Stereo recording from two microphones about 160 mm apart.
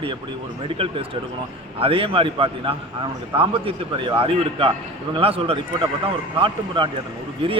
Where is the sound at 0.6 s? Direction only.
35° right (ahead or behind).